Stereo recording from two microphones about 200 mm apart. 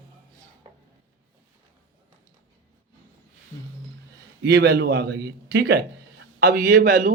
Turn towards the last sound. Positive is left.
turn(degrees=-50)  # may be behind; listen again after turning